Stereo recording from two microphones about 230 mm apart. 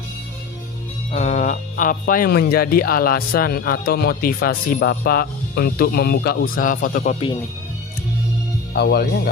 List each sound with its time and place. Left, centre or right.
1.1 s speech: left
8.7 s speech: left